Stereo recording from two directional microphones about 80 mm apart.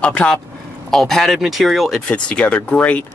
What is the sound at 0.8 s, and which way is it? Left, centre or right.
Speech, centre.